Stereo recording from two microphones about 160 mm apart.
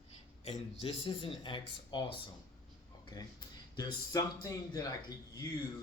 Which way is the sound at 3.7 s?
25° left (ahead or behind).